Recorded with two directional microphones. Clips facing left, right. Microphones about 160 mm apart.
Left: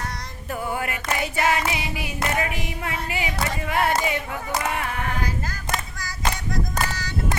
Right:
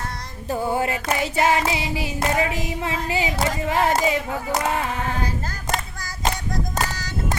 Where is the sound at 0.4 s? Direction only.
30° right (ahead or behind).